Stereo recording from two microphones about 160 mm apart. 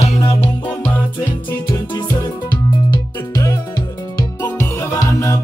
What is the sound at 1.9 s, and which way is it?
Music, 20° left (ahead or behind).